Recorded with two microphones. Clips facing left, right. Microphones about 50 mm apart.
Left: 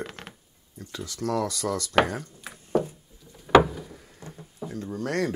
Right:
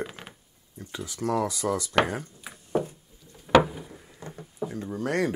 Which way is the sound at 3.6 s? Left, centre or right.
Centre.